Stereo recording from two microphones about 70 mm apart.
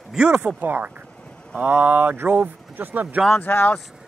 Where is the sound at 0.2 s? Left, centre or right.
Centre.